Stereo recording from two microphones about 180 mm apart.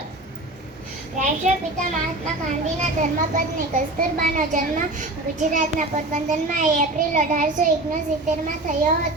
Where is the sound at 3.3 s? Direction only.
45° right (ahead or behind).